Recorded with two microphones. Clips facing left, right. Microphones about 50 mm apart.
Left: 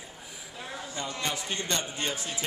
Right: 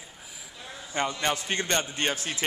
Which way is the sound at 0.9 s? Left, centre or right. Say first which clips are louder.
Right 7 dB; right.